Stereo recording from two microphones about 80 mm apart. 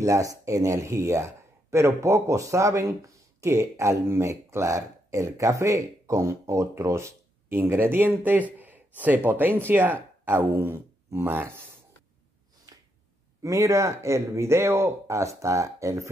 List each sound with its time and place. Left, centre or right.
0.0 s speech: right
12.7 s finger snapping: right
13.4 s speech: right